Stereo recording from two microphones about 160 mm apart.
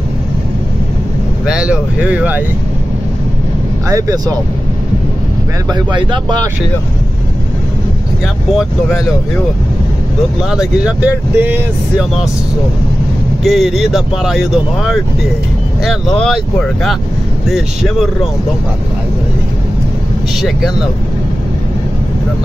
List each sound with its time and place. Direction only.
1.4 s speech: 5° right (ahead or behind)
3.9 s speech: 20° right (ahead or behind)
5.7 s speech: 25° right (ahead or behind)
10.5 s speech: 5° right (ahead or behind)
13.4 s speech: centre (ahead or behind)